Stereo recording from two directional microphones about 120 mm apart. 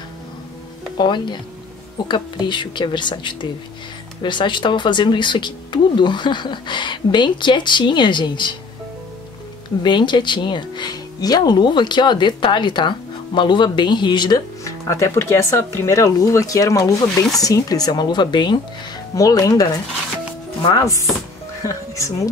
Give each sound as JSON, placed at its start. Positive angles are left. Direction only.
{"t": 0.9, "sound": "speech", "side_deg": 40}
{"t": 9.8, "sound": "speech", "side_deg": 40}
{"t": 14.6, "sound": "speech", "side_deg": 25}